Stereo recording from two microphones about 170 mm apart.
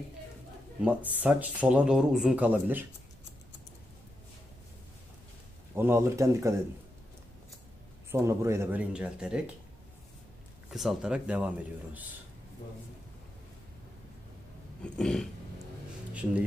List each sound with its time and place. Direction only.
0.8 s speech: 10° right (ahead or behind)
5.8 s speech: 15° right (ahead or behind)
8.1 s a man's voice: 15° right (ahead or behind)
10.7 s a man's voice: centre (ahead or behind)
14.8 s a sound: 5° left (ahead or behind)
16.1 s a sound: 10° right (ahead or behind)